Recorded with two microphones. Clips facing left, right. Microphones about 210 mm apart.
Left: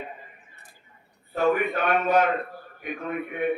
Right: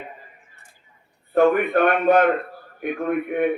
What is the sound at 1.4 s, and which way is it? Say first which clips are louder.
A man's voice: right 6 dB; 55° right (ahead or behind).